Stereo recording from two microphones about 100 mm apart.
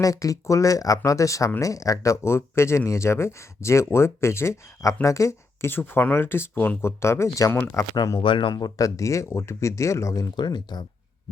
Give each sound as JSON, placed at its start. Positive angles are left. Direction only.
{"t": 0.0, "sound": "speech", "side_deg": 35}
{"t": 7.9, "sound": "speech", "side_deg": 40}
{"t": 8.2, "sound": "speech", "side_deg": 55}